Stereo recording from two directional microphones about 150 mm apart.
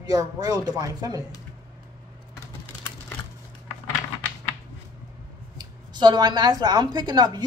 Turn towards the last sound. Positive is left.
turn(degrees=-25)  # may be behind; listen again after turning